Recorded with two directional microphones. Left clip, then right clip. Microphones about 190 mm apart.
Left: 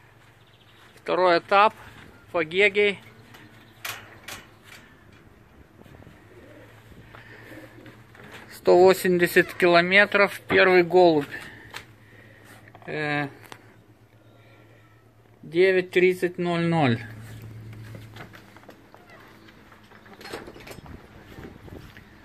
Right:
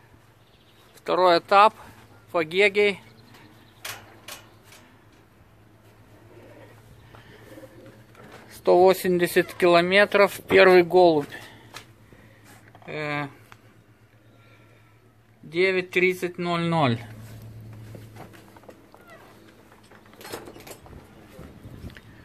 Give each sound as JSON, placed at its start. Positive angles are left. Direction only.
{"t": 1.0, "sound": "speech", "side_deg": -15}
{"t": 8.6, "sound": "speech", "side_deg": 0}
{"t": 10.9, "sound": "speech", "side_deg": 0}
{"t": 12.8, "sound": "speech", "side_deg": 5}
{"t": 15.5, "sound": "speech", "side_deg": 0}